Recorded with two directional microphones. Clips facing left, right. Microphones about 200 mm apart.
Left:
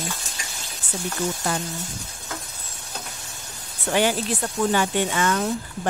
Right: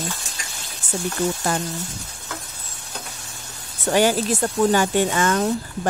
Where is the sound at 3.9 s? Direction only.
40° right (ahead or behind).